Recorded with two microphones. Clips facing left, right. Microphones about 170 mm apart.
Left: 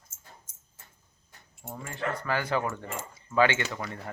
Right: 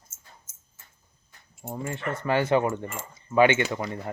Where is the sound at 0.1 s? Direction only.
5° right (ahead or behind).